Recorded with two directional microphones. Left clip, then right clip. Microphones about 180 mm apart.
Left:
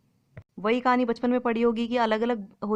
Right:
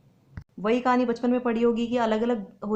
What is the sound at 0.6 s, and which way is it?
A woman's voice, 40° left (ahead or behind).